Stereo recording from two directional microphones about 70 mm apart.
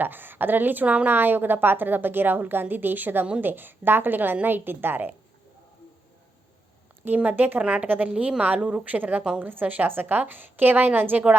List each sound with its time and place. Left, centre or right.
0.0 s a woman's voice: right
7.0 s a woman's voice: right